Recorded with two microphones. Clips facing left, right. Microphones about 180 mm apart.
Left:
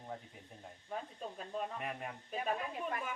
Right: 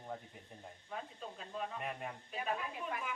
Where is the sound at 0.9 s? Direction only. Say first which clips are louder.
Left 3 dB; 40° left (ahead or behind).